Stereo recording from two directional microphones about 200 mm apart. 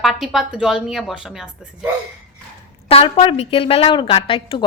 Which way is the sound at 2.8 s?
30° left (ahead or behind).